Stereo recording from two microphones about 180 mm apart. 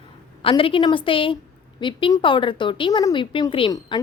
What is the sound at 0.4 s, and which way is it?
Speech, 30° left (ahead or behind).